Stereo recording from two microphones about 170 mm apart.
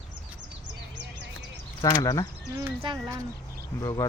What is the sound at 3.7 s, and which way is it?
Speech, 20° left (ahead or behind).